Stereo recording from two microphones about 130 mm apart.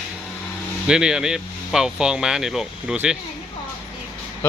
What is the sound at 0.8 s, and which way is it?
Speech, 5° right (ahead or behind).